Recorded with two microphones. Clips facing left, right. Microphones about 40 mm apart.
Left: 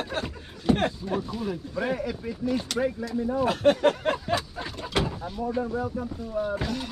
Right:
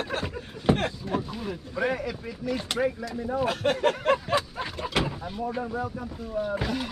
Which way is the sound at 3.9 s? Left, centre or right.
Centre.